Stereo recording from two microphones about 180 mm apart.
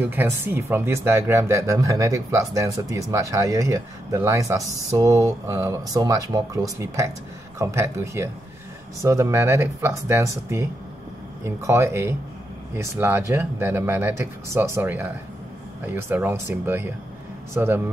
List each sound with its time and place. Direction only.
0.0 s speech: 10° right (ahead or behind)